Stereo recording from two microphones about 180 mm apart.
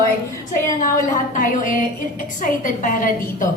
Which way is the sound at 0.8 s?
50° left (ahead or behind).